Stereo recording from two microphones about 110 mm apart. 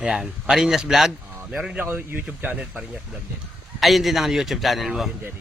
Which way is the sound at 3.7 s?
Centre (ahead or behind).